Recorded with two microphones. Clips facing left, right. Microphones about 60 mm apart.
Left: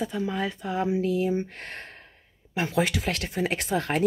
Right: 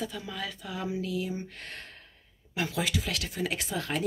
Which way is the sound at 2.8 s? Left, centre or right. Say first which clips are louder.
Left 8 dB; left.